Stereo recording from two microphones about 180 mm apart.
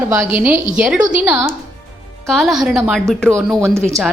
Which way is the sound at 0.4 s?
10° right (ahead or behind).